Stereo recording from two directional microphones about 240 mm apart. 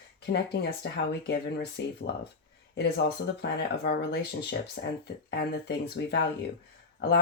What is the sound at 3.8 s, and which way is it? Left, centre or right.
Speech, left.